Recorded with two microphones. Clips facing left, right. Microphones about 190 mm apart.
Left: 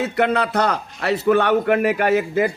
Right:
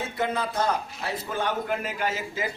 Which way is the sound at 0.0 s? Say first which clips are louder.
Left 9 dB; 70° left (ahead or behind).